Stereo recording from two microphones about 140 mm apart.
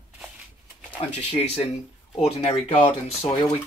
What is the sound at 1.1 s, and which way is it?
Speech, 45° left (ahead or behind).